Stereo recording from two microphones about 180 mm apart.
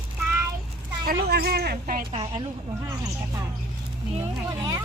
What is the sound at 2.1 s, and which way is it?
Speech, 30° right (ahead or behind).